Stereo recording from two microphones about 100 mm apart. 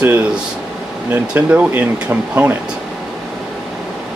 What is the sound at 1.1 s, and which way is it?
Speech, 15° right (ahead or behind).